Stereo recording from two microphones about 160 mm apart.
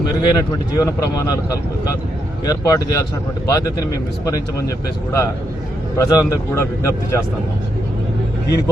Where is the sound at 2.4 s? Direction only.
25° left (ahead or behind).